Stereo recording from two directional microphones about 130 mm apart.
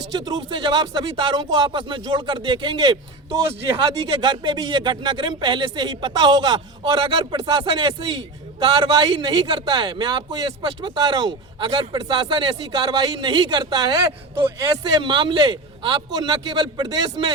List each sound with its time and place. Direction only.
0.1 s speech: 35° right (ahead or behind)
15.0 s speech: 40° right (ahead or behind)